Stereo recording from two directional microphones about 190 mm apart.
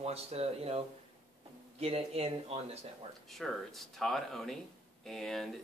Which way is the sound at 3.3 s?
Centre (ahead or behind).